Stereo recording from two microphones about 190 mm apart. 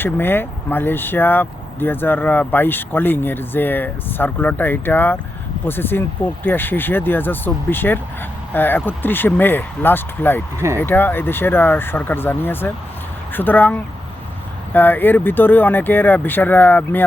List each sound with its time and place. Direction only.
0.0 s speech: 10° left (ahead or behind)